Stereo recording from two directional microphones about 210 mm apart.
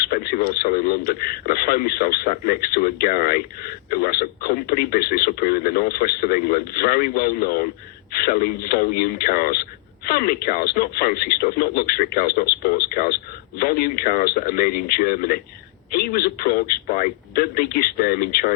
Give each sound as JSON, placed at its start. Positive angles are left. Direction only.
{"t": 0.1, "sound": "speech", "side_deg": 45}